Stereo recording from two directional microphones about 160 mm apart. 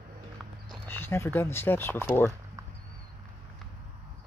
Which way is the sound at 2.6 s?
20° right (ahead or behind).